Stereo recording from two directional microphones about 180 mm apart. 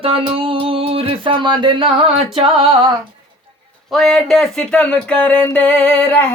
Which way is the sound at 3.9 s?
Centre (ahead or behind).